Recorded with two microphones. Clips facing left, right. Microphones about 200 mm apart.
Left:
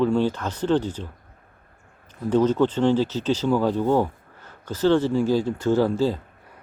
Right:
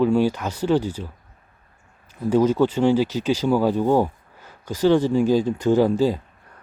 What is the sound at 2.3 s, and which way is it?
Speech, 10° right (ahead or behind).